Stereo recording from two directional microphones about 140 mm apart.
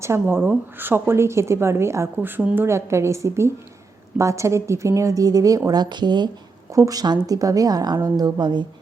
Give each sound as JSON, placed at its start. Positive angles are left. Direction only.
{"t": 0.0, "sound": "a woman's voice", "side_deg": -15}